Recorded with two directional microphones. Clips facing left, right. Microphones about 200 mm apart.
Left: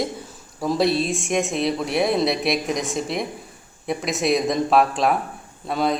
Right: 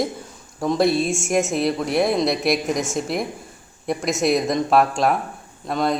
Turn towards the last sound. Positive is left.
turn(degrees=0)  # may be behind; listen again after turning